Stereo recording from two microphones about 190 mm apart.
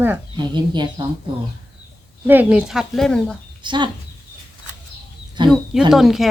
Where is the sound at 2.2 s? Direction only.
10° right (ahead or behind).